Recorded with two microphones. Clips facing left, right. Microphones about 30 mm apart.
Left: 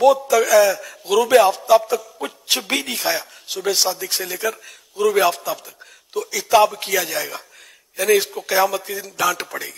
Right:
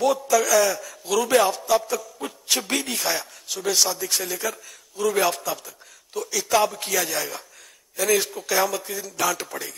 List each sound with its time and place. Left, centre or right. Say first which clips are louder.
0.0 s a man's voice: left 6 dB; centre
1.2 s a man's voice: left 6 dB; centre